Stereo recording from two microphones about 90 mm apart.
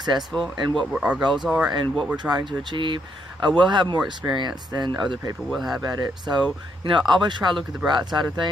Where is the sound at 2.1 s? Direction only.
55° right (ahead or behind).